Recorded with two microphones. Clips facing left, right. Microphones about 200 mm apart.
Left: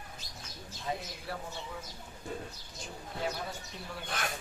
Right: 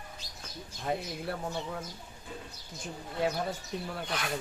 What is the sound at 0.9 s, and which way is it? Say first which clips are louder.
Speech: right 4 dB; 60° right (ahead or behind).